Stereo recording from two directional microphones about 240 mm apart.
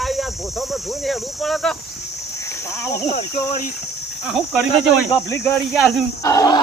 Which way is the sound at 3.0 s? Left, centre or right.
Left.